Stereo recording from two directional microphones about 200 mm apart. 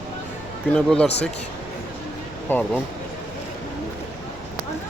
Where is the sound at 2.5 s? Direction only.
10° left (ahead or behind).